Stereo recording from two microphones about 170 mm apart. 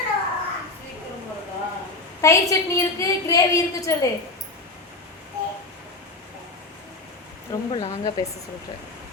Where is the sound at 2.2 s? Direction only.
15° left (ahead or behind).